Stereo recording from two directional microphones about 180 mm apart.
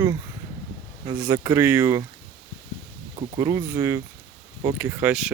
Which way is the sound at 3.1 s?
20° right (ahead or behind).